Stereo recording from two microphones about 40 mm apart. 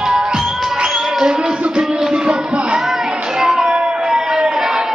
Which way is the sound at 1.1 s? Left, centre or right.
Right.